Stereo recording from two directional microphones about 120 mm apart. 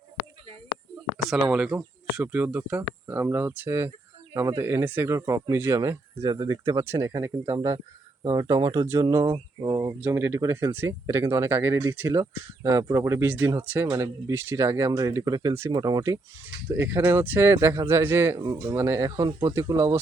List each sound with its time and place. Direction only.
1.2 s speech: 5° right (ahead or behind); by 9.9 s 30° right (ahead or behind)
10.1 s speech: 20° right (ahead or behind)
16.6 s speech: 20° right (ahead or behind)